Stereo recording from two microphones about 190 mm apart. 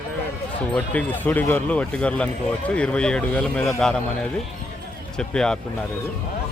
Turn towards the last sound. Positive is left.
turn(degrees=5)  # may be behind; listen again after turning